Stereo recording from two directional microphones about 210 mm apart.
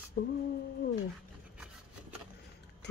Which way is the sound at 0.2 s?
50° left (ahead or behind).